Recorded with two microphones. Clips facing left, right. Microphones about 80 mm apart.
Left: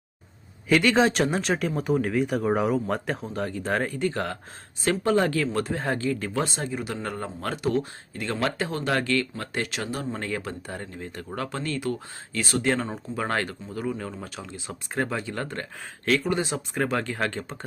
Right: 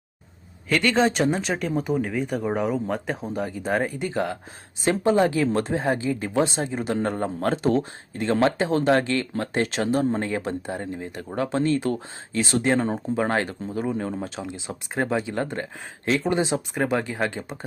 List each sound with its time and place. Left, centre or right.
0.7 s speech: centre